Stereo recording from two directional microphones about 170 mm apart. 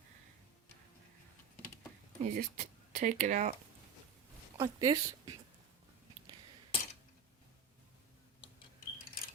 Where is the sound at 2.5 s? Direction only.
50° right (ahead or behind).